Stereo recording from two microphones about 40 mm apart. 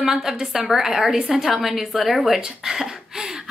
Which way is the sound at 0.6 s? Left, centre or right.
Centre.